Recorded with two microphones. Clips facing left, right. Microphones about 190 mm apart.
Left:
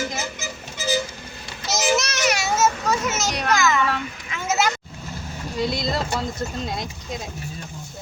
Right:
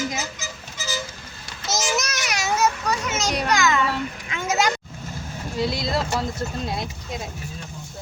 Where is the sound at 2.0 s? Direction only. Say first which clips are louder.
Left 4 dB; centre (ahead or behind).